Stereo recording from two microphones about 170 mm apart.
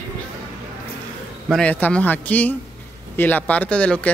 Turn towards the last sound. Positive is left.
turn(degrees=5)  # may be behind; listen again after turning